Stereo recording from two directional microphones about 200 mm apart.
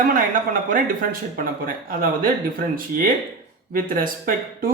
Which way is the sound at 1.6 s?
45° right (ahead or behind).